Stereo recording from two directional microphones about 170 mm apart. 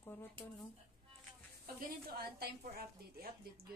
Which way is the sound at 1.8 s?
60° right (ahead or behind).